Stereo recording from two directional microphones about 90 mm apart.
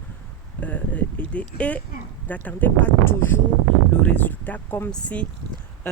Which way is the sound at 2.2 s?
15° left (ahead or behind).